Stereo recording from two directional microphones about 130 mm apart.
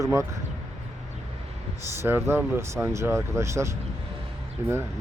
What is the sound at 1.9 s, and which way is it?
Speech, 20° right (ahead or behind).